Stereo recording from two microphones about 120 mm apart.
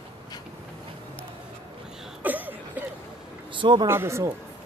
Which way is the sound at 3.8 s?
20° right (ahead or behind).